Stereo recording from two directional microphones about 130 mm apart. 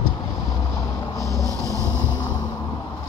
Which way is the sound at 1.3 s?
25° right (ahead or behind).